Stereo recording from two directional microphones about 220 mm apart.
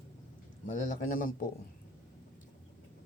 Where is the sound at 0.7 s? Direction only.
35° left (ahead or behind).